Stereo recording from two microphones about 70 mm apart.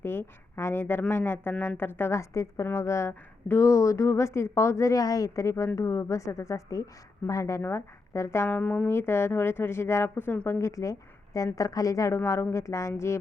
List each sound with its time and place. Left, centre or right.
0.0 s a woman's voice: left
3.7 s a woman's voice: left
7.6 s speech: left
8.4 s speech: left
8.9 s a woman's voice: left